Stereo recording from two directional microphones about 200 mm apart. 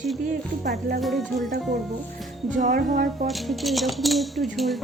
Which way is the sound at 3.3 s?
Centre (ahead or behind).